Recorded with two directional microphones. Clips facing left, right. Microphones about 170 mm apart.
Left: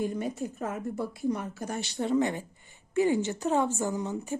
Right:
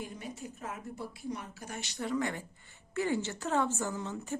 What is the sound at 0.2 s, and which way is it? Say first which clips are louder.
Speech: left 10 dB; 50° left (ahead or behind).